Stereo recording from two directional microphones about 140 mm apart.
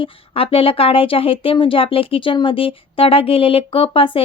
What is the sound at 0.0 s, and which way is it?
Speech, 40° left (ahead or behind).